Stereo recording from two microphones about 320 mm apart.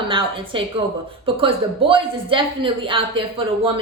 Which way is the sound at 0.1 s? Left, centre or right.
Centre.